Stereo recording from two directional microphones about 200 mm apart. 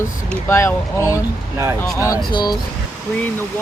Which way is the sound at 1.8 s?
10° left (ahead or behind).